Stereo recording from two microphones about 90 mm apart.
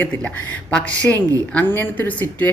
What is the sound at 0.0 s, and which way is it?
Speech, 15° left (ahead or behind).